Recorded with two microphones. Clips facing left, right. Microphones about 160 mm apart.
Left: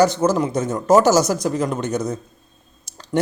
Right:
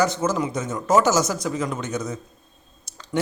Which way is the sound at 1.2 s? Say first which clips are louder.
Left 5 dB; 65° left (ahead or behind).